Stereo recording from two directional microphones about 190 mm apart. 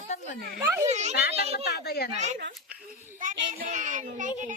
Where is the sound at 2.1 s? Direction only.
35° right (ahead or behind).